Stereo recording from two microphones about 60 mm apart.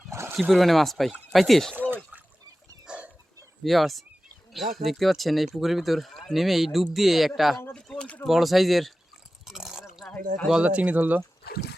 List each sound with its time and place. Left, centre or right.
0.1 s dog: right
0.5 s speech: centre
1.7 s a sound: right
2.8 s a sound: centre
3.6 s speech: centre
7.7 s speech: centre
8.3 s speech: centre
9.5 s a sound: centre
10.6 s speech: right